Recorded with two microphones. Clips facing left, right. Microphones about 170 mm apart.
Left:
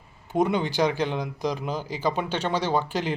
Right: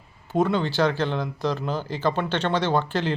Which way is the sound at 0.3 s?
15° left (ahead or behind).